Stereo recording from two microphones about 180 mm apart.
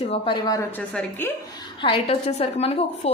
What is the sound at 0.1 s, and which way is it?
Speech, 25° left (ahead or behind).